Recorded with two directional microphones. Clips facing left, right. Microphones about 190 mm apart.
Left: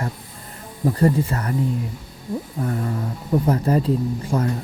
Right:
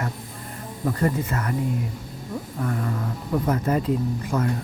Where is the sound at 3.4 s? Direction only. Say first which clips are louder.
Left 2 dB; 30° left (ahead or behind).